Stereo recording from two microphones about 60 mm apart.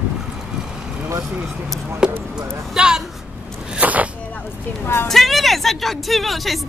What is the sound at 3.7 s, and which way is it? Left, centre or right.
Zipper, right.